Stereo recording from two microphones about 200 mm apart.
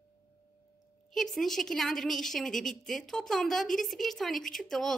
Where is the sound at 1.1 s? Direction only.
Centre (ahead or behind).